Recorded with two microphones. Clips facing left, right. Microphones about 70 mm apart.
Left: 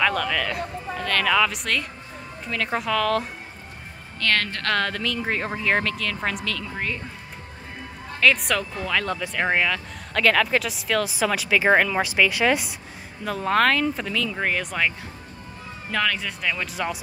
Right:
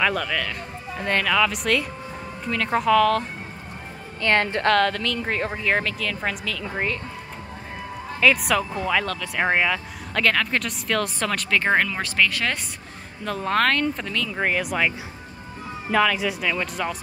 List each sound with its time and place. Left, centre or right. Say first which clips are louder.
0.0 s speech: left 1 dB; centre
0.9 s a woman's voice: right 2 dB; right
1.2 s speech: left 1 dB; centre
4.2 s a woman's voice: right 3 dB; right
4.6 s speech: right 4 dB; centre
8.2 s speech: right 1 dB; centre
9.0 s speech: left 2 dB; centre
9.3 s speech: right 2 dB; centre